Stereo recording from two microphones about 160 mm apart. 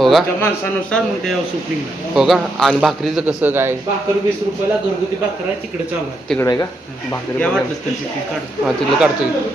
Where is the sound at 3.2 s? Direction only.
15° right (ahead or behind).